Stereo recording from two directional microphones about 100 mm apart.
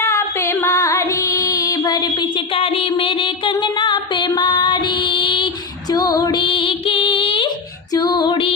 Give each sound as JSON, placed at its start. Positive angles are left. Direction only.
{"t": 0.0, "sound": "female singing", "side_deg": 25}
{"t": 2.5, "sound": "music", "side_deg": 75}
{"t": 5.9, "sound": "female singing", "side_deg": 40}
{"t": 7.9, "sound": "female singing", "side_deg": 45}